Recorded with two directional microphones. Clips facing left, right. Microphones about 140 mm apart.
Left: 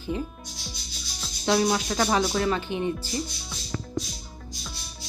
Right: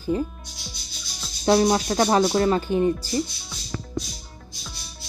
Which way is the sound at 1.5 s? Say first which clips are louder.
Right 5 dB; 35° right (ahead or behind).